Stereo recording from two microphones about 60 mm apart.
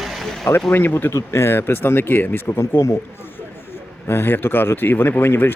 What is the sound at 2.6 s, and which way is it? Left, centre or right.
Speech, left.